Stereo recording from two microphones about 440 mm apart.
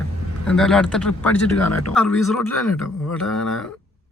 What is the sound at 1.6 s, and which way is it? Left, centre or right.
Speech, left.